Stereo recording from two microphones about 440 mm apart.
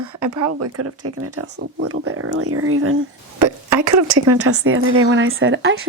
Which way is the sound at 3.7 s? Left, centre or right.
Right.